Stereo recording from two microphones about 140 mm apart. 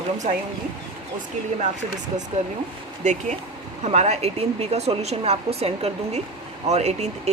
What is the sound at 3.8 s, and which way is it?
Speech, 55° right (ahead or behind).